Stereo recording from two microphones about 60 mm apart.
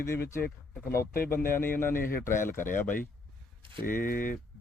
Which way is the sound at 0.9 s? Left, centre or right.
Left.